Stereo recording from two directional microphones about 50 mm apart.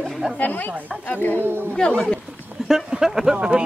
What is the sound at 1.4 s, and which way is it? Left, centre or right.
Speech, right.